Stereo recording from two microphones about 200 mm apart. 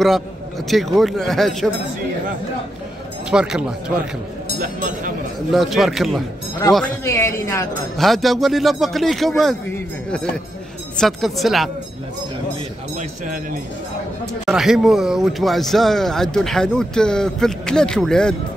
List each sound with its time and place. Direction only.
0.7 s a man's voice: centre (ahead or behind)
3.3 s a man's voice: 5° right (ahead or behind)
4.6 s speech: 40° right (ahead or behind)
5.5 s a man's voice: centre (ahead or behind)
7.1 s speech: 15° left (ahead or behind)
8.0 s a man's voice: centre (ahead or behind)
11.0 s a man's voice: centre (ahead or behind)
14.4 s a man's voice: centre (ahead or behind)